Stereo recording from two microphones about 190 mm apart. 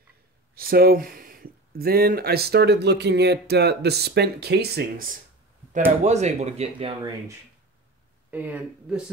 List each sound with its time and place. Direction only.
0.6 s speech: 50° right (ahead or behind)
6.0 s speech: 35° right (ahead or behind)
8.3 s speech: 10° right (ahead or behind)